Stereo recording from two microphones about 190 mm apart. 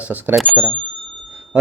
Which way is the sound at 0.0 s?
10° right (ahead or behind).